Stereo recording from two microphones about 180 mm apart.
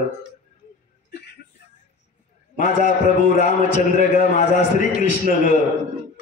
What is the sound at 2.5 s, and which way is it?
A man's voice, 45° left (ahead or behind).